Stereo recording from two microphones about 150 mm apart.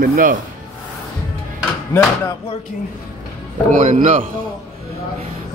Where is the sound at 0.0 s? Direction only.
70° right (ahead or behind).